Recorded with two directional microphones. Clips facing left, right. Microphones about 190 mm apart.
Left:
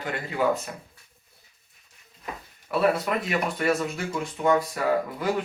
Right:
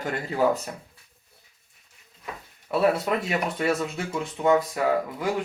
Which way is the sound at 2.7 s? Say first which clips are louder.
Right 1 dB; 25° right (ahead or behind).